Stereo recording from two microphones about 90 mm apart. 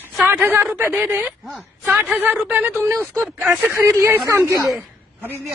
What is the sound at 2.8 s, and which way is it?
A man's voice, 30° right (ahead or behind).